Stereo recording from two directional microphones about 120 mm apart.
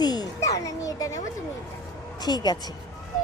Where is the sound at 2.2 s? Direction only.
35° left (ahead or behind).